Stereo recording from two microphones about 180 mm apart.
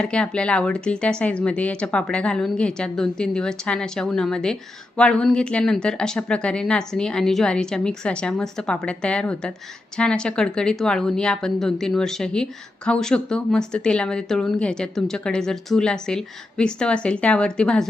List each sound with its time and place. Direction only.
0.0 s speech: 5° left (ahead or behind)